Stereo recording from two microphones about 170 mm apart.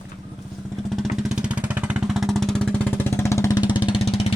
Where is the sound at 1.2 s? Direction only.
5° right (ahead or behind); by 3.6 s 20° left (ahead or behind).